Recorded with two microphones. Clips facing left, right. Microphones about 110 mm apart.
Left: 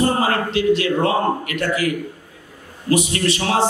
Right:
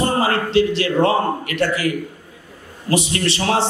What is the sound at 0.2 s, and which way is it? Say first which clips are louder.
Speech: right 2 dB; 30° right (ahead or behind).